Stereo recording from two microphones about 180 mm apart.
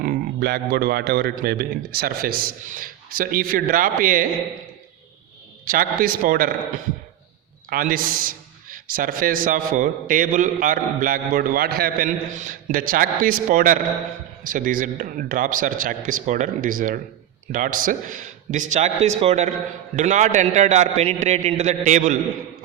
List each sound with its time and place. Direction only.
0.0 s a man's voice: 60° right (ahead or behind)
5.6 s a man's voice: 50° right (ahead or behind)
7.7 s a man's voice: 50° right (ahead or behind)